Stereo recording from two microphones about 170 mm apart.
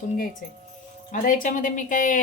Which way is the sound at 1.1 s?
50° left (ahead or behind).